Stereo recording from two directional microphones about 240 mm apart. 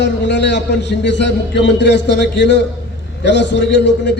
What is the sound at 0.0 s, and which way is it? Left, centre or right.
A man's voice, left.